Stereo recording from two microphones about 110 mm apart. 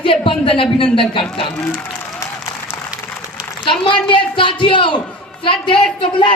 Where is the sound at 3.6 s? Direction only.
50° left (ahead or behind).